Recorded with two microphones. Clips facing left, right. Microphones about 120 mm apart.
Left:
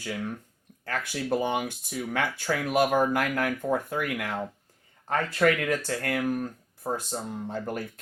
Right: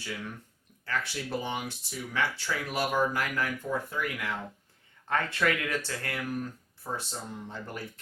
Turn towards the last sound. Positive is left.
turn(degrees=45)  # may be behind; listen again after turning